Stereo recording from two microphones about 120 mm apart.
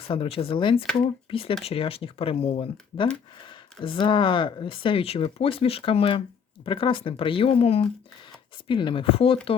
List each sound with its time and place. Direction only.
0.1 s speech: 50° left (ahead or behind)